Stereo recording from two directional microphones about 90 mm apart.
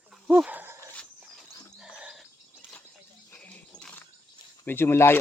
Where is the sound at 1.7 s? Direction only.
10° right (ahead or behind).